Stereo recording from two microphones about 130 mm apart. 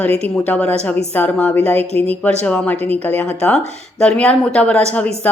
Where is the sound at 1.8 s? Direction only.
50° right (ahead or behind).